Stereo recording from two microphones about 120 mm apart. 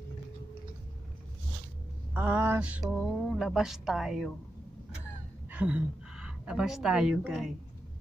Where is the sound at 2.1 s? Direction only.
15° right (ahead or behind).